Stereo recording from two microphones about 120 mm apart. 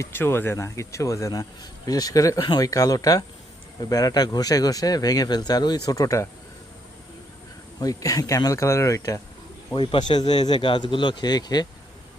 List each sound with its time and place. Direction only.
0.0 s speech: 20° left (ahead or behind)
7.8 s speech: 30° left (ahead or behind)
9.7 s speech: 40° left (ahead or behind)